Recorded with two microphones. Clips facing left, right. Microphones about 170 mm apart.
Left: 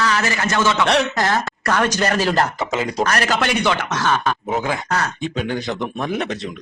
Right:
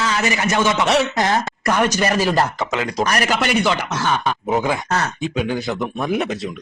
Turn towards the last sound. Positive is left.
turn(degrees=-10)  # may be behind; listen again after turning